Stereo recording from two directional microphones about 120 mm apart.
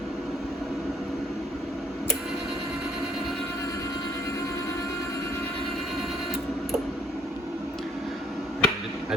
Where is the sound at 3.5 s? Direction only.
30° left (ahead or behind).